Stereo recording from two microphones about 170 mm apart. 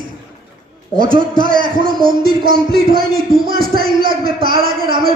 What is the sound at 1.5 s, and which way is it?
Speech, 55° right (ahead or behind).